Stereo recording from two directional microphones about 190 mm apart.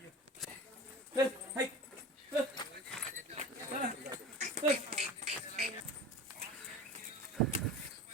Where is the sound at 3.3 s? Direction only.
35° right (ahead or behind).